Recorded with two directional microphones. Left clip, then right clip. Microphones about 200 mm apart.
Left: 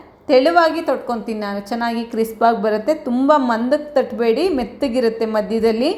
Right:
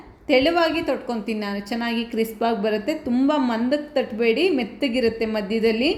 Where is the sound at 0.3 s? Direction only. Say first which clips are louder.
Left 6 dB; centre (ahead or behind).